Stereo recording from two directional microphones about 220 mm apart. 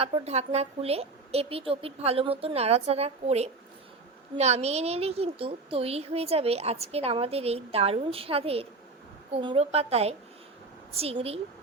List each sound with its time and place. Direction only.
0.0 s a woman's voice: 30° right (ahead or behind)